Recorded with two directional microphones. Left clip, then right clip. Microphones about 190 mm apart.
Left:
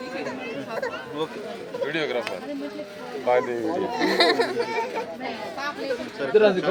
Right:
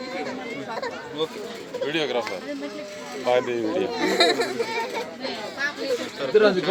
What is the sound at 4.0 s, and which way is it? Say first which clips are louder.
Speech: left 1 dB; 50° left (ahead or behind).